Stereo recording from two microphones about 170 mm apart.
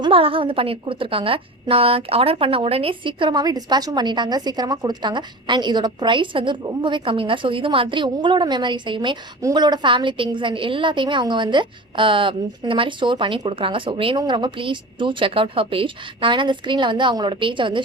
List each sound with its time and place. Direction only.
0.0 s a woman's voice: 35° right (ahead or behind)